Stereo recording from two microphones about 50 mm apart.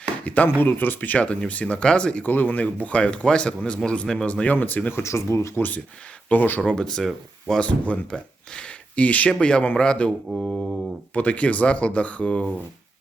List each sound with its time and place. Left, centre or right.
0.4 s speech: left
1.2 s speech: left
2.2 s speech: left; by 4.4 s centre
4.4 s speech: left
5.0 s speech: left
5.5 s speech: left
6.6 s speech: centre
7.6 s speech: left
10.3 s mantra: centre
11.1 s speech: left